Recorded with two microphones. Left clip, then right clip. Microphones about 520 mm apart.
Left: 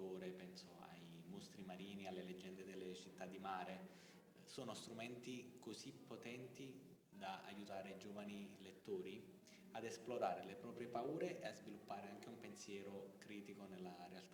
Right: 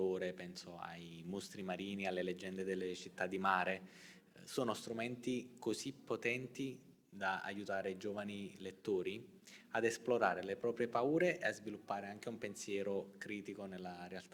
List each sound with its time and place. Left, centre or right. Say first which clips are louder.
0.0 s a man's voice: right 13 dB; right